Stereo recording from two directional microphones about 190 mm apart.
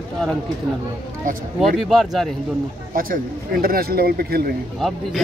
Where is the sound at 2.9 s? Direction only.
50° right (ahead or behind).